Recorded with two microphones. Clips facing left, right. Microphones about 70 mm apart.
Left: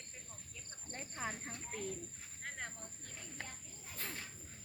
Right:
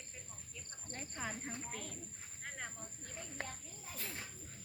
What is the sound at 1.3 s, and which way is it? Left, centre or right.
Speech, centre.